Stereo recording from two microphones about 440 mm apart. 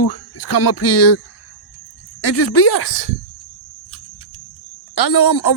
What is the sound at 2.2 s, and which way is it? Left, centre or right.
Speech, left.